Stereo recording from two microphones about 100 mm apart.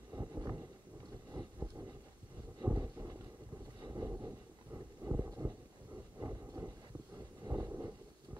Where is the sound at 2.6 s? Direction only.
35° right (ahead or behind).